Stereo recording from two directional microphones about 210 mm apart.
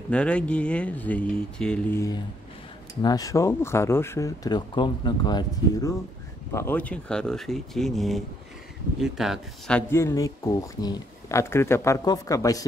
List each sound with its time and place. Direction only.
0.1 s speech: 5° left (ahead or behind)